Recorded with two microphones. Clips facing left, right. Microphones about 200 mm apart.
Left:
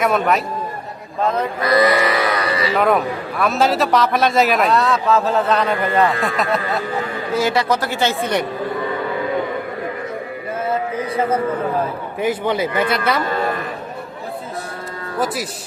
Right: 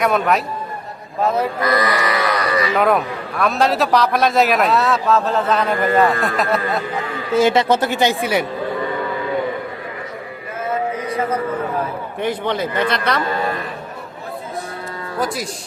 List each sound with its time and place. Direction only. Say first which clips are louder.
0.0 s a man's voice: even; centre (ahead or behind)
1.2 s a sound: right 1 dB; 5° right (ahead or behind)
1.6 s speech: left 6 dB; 25° left (ahead or behind)
2.7 s a man's voice: left 2 dB; centre (ahead or behind)
7.3 s speech: right 4 dB; 25° right (ahead or behind)
12.2 s a man's voice: left 2 dB; 5° left (ahead or behind)